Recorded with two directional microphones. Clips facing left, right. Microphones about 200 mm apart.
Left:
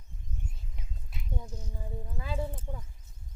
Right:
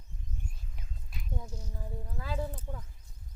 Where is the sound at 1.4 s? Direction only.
10° right (ahead or behind).